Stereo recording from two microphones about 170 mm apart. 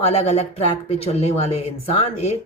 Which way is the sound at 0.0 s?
35° left (ahead or behind).